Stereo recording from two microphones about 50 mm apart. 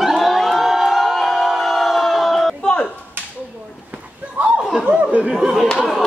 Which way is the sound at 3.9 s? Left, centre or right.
Right.